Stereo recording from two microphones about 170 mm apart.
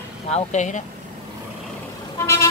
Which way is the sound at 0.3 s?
40° left (ahead or behind).